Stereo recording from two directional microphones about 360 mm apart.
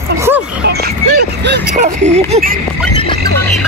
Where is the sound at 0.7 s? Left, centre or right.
Right.